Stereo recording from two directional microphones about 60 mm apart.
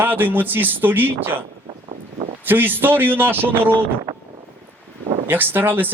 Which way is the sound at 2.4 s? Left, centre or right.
Right.